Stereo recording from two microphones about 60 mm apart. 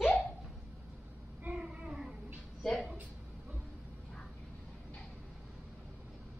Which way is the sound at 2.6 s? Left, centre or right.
Centre.